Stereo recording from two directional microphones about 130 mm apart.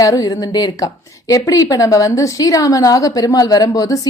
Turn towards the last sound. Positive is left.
turn(degrees=25)  # may be behind; listen again after turning